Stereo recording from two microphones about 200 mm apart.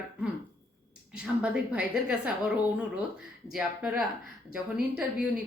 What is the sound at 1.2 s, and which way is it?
Speech, 5° right (ahead or behind).